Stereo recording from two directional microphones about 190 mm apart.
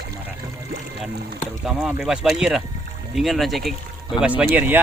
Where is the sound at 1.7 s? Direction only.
5° right (ahead or behind).